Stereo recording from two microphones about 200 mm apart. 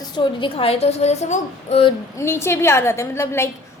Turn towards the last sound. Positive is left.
turn(degrees=10)  # may be behind; listen again after turning